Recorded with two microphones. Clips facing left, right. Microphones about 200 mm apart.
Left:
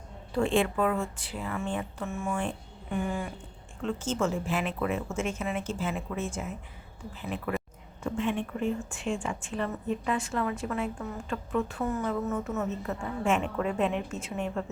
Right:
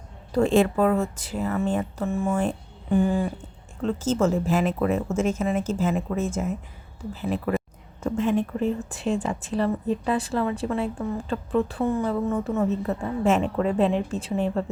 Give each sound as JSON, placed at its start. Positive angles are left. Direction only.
{"t": 0.3, "sound": "a woman's voice", "side_deg": -40}